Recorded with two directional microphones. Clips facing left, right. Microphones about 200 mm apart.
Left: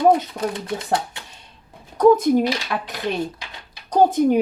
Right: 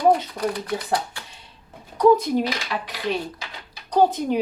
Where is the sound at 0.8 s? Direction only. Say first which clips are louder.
Left 2 dB; 25° left (ahead or behind).